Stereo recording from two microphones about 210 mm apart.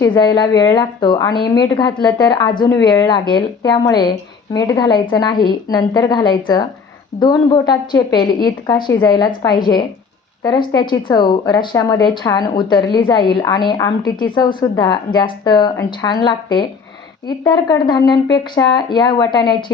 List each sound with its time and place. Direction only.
0.0 s speech: 15° left (ahead or behind)